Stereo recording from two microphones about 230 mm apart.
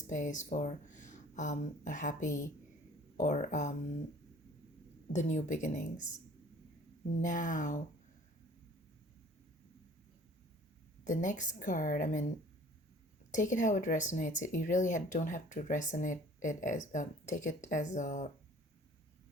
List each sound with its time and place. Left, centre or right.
0.0 s speech: left
5.1 s speech: left
7.2 s speech: left
11.0 s speech: left
13.3 s speech: left